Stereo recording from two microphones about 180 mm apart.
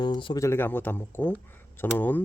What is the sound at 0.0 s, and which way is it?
Speech, 25° left (ahead or behind).